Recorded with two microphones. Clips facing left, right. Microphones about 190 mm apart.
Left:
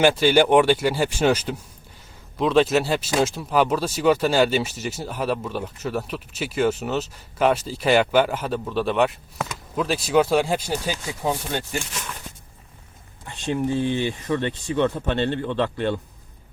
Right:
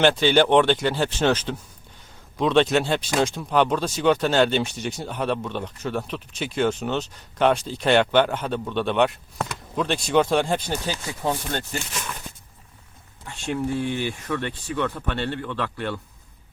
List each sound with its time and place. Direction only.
0.0 s speech: 10° left (ahead or behind)
13.2 s speech: 20° left (ahead or behind)